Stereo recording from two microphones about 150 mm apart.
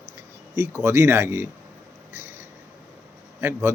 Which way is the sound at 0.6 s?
15° right (ahead or behind).